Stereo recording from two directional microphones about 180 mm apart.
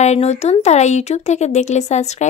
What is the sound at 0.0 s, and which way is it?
Speech, 40° left (ahead or behind).